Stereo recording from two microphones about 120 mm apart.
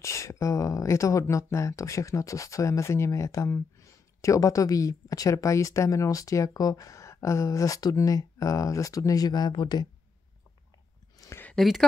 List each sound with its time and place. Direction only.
0.0 s speech: 25° left (ahead or behind)
11.1 s a sound: 25° left (ahead or behind)
11.5 s speech: centre (ahead or behind)